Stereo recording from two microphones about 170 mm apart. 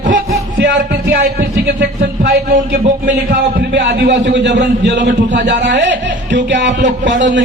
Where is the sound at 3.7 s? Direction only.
90° right.